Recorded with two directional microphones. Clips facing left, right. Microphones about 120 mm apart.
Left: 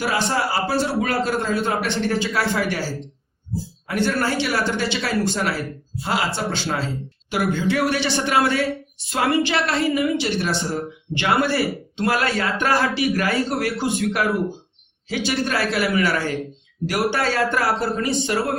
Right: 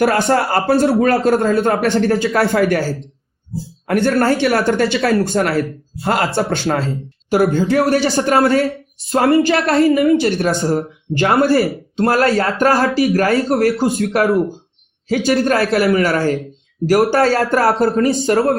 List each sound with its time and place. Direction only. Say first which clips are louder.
0.0 s a woman's voice: right 8 dB; 55° right (ahead or behind)
7.3 s a woman's voice: right 7 dB; 40° right (ahead or behind)
17.2 s a woman's voice: right 7 dB; 50° right (ahead or behind)